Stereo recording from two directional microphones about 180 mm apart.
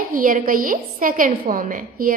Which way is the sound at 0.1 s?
50° right (ahead or behind).